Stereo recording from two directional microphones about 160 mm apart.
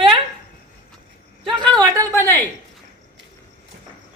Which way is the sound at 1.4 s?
30° right (ahead or behind).